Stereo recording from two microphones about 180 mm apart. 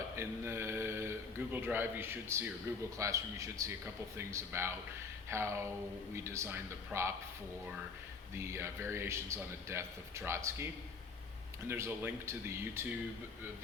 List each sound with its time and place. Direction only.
0.2 s mantra: 15° right (ahead or behind)
1.5 s a man's voice: 10° right (ahead or behind)
8.4 s a man's voice: 15° right (ahead or behind)
11.7 s a man's voice: 10° right (ahead or behind)